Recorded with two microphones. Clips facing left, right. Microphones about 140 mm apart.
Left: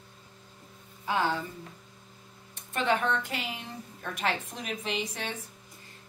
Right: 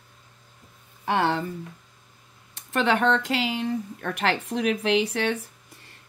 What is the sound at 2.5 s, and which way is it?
Speech, 80° right.